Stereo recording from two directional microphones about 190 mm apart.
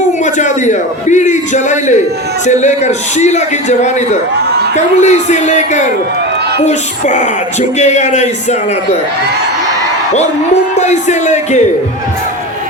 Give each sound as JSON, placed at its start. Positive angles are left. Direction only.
{"t": 0.3, "sound": "a man's voice", "side_deg": 40}
{"t": 10.8, "sound": "a man's voice", "side_deg": 40}